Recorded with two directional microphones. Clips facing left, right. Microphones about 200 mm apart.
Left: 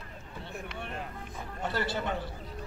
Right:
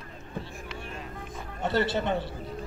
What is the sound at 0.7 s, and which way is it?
Vehicle, 60° left (ahead or behind).